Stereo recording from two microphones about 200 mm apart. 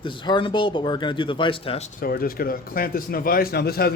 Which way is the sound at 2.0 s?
45° left (ahead or behind).